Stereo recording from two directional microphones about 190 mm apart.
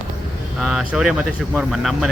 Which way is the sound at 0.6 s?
Centre (ahead or behind).